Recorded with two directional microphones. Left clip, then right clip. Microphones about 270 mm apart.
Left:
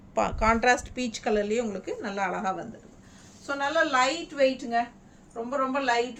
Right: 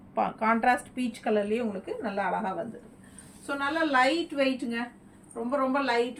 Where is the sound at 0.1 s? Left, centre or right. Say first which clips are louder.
Left 2 dB; left.